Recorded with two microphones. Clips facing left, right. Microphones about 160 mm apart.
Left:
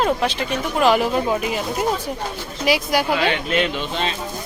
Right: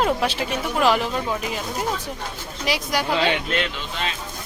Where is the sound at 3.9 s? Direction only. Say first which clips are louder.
Left 5 dB; 30° left (ahead or behind).